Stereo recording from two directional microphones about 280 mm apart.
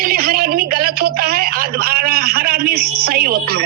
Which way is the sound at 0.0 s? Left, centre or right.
Right.